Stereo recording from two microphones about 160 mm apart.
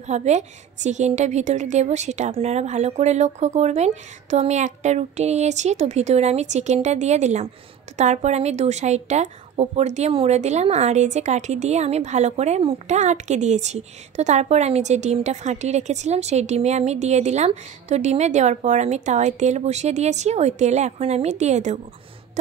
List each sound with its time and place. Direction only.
0.0 s a woman's voice: 45° right (ahead or behind)